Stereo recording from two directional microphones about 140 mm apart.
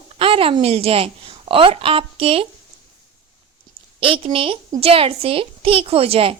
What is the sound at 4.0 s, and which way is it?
A child's voice, 40° right (ahead or behind).